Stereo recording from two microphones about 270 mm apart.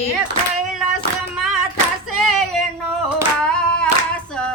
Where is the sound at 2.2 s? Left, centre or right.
Centre.